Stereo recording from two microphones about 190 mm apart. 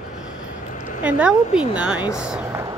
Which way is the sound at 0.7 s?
40° left (ahead or behind).